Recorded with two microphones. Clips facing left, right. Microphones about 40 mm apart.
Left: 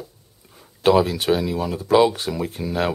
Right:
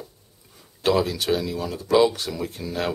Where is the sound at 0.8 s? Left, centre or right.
Centre.